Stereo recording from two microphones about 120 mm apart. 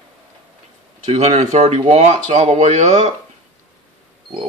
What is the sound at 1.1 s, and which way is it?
Speech, 65° right (ahead or behind).